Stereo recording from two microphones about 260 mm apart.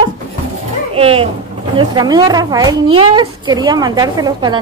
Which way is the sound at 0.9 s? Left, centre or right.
Right.